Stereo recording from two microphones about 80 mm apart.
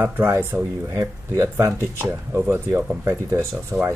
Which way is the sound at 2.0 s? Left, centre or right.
Right.